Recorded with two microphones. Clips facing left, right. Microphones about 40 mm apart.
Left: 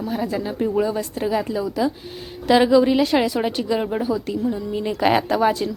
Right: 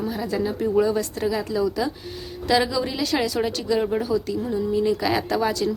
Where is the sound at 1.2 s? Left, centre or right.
Left.